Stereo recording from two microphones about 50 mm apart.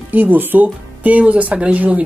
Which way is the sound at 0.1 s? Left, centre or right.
Right.